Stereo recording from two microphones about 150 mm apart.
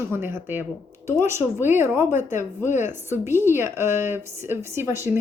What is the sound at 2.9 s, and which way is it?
A woman's voice, 15° right (ahead or behind).